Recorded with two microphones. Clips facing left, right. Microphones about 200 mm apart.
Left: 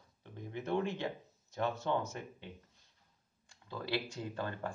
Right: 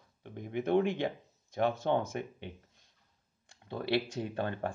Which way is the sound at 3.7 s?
65° right (ahead or behind).